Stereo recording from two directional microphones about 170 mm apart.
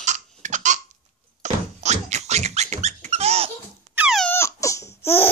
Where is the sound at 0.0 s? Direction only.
45° right (ahead or behind).